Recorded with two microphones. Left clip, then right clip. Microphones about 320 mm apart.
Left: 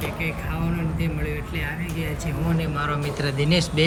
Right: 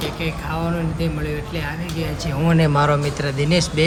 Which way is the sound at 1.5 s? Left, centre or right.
Centre.